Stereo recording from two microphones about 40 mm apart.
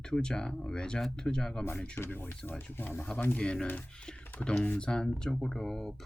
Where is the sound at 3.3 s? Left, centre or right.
Left.